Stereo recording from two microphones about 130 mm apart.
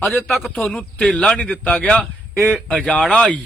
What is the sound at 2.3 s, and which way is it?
Speech, 20° right (ahead or behind).